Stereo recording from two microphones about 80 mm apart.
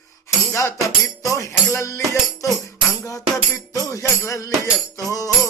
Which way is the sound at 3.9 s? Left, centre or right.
Left.